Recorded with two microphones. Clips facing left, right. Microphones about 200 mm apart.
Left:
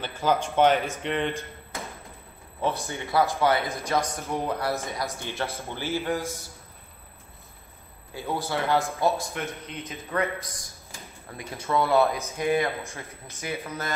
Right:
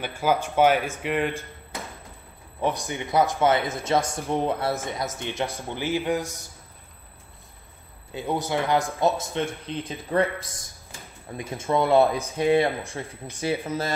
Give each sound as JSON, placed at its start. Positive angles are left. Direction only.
{"t": 0.0, "sound": "a man's voice", "side_deg": -10}
{"t": 2.6, "sound": "a man's voice", "side_deg": -15}
{"t": 8.1, "sound": "a man's voice", "side_deg": -20}